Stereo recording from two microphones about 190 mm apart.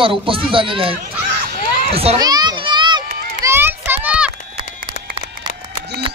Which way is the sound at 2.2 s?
20° right (ahead or behind).